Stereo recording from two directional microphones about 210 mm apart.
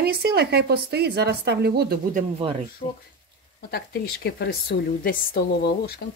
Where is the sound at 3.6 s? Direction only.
50° left (ahead or behind).